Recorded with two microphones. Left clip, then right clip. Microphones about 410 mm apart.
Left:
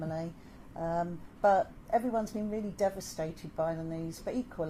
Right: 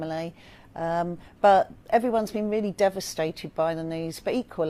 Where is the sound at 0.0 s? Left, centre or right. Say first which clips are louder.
Right 7 dB; right.